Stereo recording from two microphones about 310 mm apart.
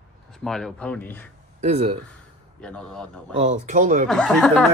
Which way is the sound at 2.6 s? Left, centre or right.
Centre.